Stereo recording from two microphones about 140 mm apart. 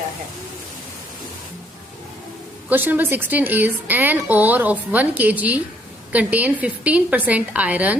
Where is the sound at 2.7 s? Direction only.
15° right (ahead or behind).